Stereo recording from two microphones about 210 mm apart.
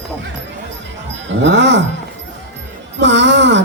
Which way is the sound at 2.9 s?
55° right (ahead or behind).